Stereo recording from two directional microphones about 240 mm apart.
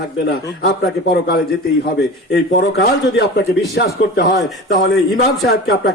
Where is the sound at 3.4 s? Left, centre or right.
Left.